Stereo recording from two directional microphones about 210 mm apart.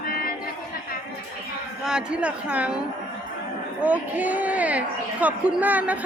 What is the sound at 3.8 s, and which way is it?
Speech, 5° right (ahead or behind).